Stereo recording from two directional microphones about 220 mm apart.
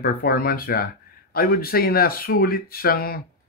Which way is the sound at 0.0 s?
45° left (ahead or behind).